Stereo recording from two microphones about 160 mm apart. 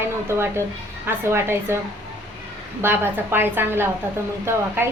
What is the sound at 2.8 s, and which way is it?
A woman's voice, 15° right (ahead or behind).